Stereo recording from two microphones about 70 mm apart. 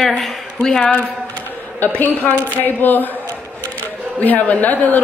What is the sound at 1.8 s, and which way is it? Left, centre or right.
A woman's voice, left.